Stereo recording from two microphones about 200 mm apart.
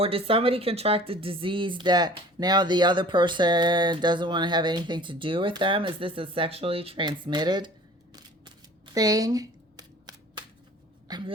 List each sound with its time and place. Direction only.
0.0 s speech: 30° right (ahead or behind)
8.1 s a sound: 20° right (ahead or behind)
11.1 s speech: 20° right (ahead or behind)